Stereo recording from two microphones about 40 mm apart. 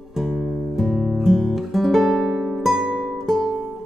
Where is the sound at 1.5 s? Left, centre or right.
Centre.